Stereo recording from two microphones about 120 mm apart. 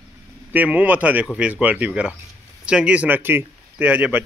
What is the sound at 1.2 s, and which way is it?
Speech, centre (ahead or behind).